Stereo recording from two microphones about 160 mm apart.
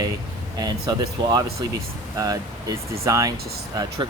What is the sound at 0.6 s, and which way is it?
Speech, 25° right (ahead or behind).